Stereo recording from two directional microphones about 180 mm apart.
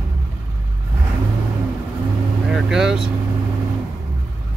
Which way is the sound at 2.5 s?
5° right (ahead or behind).